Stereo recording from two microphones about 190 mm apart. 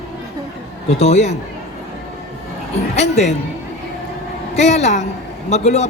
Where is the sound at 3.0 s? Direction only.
35° left (ahead or behind).